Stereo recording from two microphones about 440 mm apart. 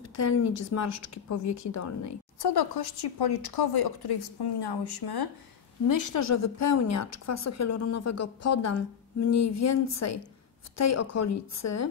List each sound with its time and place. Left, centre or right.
0.1 s a woman's voice: left
2.4 s a woman's voice: left
5.9 s a woman's voice: left